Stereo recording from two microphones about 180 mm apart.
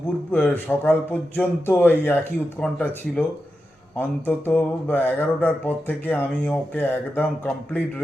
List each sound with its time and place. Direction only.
0.3 s speech: 10° left (ahead or behind)